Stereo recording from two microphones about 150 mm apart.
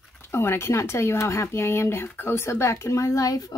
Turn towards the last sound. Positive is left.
turn(degrees=25)  # may be behind; listen again after turning